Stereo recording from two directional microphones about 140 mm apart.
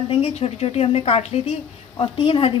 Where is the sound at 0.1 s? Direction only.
45° left (ahead or behind).